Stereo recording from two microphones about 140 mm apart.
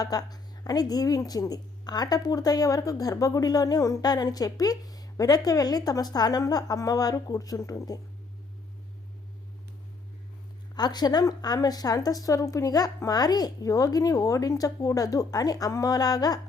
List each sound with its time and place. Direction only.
0.0 s a woman's voice: 25° left (ahead or behind)
10.8 s a woman's voice: 30° left (ahead or behind)